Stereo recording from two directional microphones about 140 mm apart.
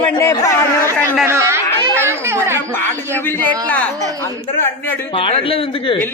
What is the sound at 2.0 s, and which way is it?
Speech, 20° right (ahead or behind).